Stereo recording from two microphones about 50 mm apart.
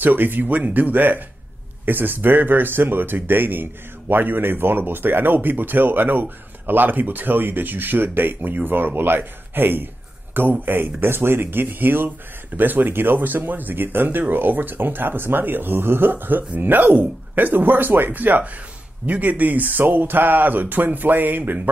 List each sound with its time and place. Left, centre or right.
0.0 s speech: right